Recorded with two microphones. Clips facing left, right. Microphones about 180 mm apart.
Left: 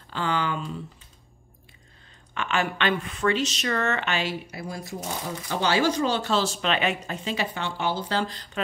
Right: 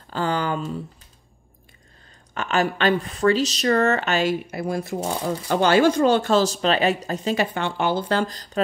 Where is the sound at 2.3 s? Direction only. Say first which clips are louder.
Right 4 dB; 40° right (ahead or behind).